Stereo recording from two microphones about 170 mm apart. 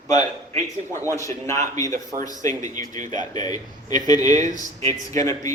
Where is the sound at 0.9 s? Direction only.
20° left (ahead or behind).